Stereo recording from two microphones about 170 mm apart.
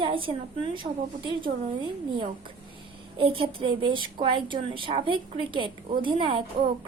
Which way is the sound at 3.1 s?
30° right (ahead or behind).